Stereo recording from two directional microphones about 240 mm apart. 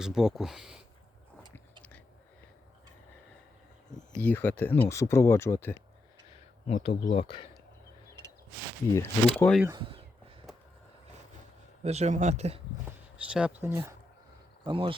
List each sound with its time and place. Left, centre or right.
0.0 s speech: centre
3.9 s speech: centre
6.7 s speech: left
9.0 s speech: centre
9.6 s a sound: centre
11.8 s speech: right
13.3 s speech: centre
14.6 s speech: right